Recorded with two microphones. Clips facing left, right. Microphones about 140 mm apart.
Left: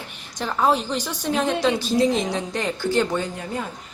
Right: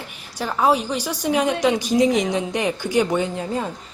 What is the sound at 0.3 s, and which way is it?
A woman's voice, 5° right (ahead or behind).